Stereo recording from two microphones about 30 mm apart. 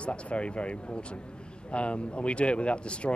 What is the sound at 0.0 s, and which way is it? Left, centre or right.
Speech, left.